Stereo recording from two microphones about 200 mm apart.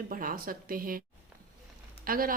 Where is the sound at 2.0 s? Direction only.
45° right (ahead or behind).